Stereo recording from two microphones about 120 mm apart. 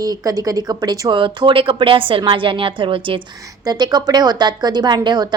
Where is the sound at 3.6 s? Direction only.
35° right (ahead or behind).